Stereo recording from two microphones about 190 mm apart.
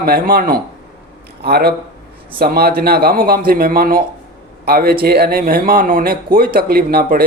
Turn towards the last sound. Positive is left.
turn(degrees=-55)  # may be behind; listen again after turning